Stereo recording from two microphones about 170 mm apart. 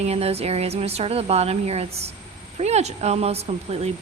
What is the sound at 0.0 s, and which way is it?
Speech, 35° right (ahead or behind).